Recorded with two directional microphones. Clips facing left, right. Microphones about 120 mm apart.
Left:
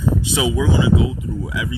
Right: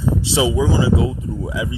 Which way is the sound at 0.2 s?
30° right (ahead or behind).